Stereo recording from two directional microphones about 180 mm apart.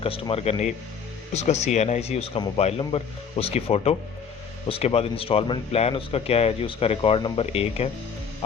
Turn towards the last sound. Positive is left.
turn(degrees=35)  # may be behind; listen again after turning